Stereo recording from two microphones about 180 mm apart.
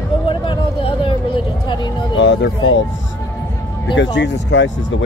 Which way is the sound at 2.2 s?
85° left.